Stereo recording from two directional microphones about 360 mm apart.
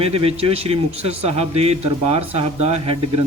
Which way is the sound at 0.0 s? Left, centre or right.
Centre.